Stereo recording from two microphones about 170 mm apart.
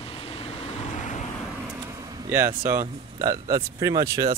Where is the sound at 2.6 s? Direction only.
20° right (ahead or behind).